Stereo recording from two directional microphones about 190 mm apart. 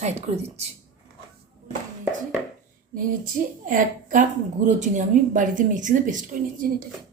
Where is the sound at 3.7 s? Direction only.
45° right (ahead or behind).